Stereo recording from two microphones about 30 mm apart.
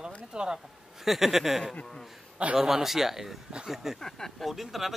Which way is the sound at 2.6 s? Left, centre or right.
Centre.